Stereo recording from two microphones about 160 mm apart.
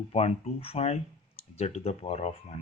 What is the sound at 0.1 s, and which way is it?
Speech, 40° left (ahead or behind).